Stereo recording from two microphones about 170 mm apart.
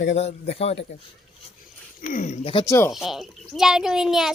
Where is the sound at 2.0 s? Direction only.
50° left (ahead or behind).